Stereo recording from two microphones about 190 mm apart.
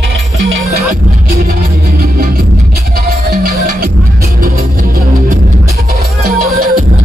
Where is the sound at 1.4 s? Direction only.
50° right (ahead or behind).